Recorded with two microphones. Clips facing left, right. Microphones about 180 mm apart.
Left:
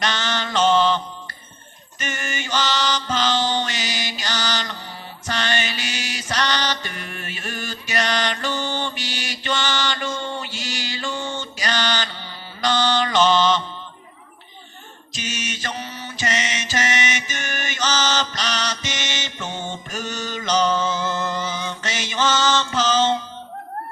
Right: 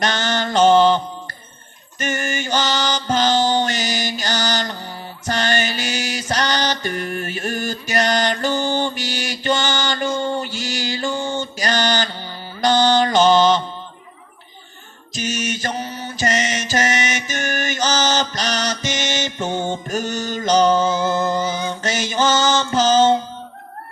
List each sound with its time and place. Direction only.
0.0 s mantra: 45° right (ahead or behind)
15.1 s mantra: 45° right (ahead or behind)